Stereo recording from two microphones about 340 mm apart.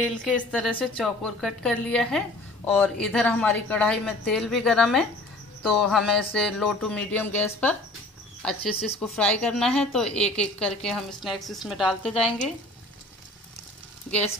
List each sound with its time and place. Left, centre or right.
0.0 s a woman's voice: centre